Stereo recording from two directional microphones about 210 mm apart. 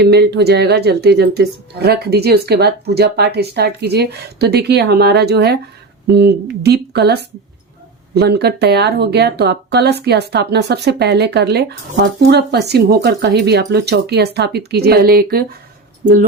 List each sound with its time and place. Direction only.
0.0 s speech: 50° right (ahead or behind)